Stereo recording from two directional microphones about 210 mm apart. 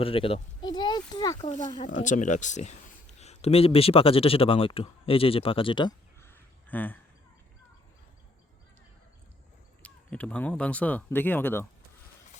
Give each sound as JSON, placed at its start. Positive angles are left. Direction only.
{"t": 0.0, "sound": "speech", "side_deg": 25}
{"t": 2.0, "sound": "speech", "side_deg": 35}
{"t": 6.2, "sound": "a sound", "side_deg": 10}
{"t": 9.8, "sound": "speech", "side_deg": 5}